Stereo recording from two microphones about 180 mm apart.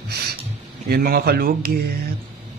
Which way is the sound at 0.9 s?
60° right (ahead or behind).